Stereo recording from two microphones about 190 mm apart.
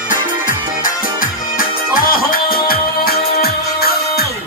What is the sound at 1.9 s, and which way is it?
Music, 50° left (ahead or behind).